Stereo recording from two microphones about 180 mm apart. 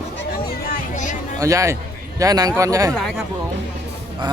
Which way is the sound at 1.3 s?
20° right (ahead or behind).